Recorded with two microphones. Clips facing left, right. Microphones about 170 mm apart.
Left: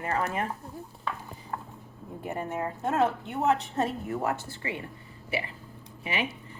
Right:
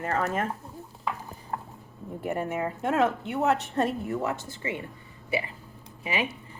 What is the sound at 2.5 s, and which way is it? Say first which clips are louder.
Speech: left 1 dB; 90° right.